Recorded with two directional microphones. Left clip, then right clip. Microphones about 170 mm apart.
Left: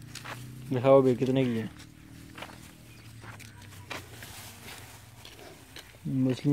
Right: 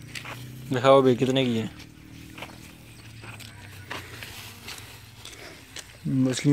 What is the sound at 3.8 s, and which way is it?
Skateboard, 25° left (ahead or behind).